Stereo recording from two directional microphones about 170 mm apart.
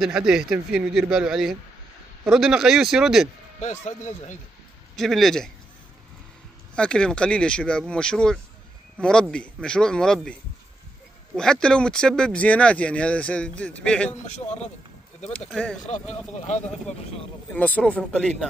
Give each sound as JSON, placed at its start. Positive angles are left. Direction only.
{"t": 0.0, "sound": "speech", "side_deg": -5}
{"t": 3.6, "sound": "speech", "side_deg": 45}
{"t": 4.9, "sound": "speech", "side_deg": 0}
{"t": 6.7, "sound": "speech", "side_deg": 5}
{"t": 11.3, "sound": "speech", "side_deg": 5}
{"t": 14.2, "sound": "speech", "side_deg": 45}
{"t": 15.5, "sound": "speech", "side_deg": 5}
{"t": 17.5, "sound": "speech", "side_deg": 10}